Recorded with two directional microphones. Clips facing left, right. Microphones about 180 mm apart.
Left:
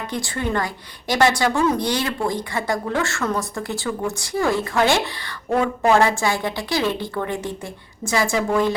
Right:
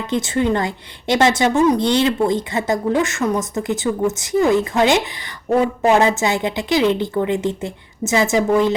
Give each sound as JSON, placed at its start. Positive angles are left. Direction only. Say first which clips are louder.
{"t": 0.1, "sound": "a woman's voice", "louder": "right 7 dB", "side_deg": -20}